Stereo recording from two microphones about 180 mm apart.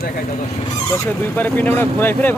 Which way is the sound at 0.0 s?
50° left (ahead or behind).